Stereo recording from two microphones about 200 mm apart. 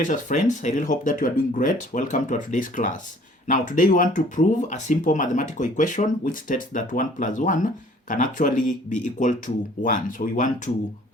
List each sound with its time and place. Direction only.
0.0 s speech: 40° left (ahead or behind)